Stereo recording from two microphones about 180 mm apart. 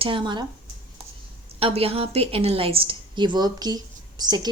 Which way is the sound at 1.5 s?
35° right (ahead or behind).